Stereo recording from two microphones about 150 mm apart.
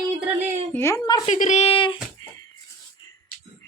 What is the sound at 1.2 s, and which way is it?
Speech, 55° left (ahead or behind).